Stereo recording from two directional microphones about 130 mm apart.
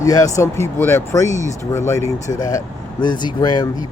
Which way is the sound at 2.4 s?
30° left (ahead or behind).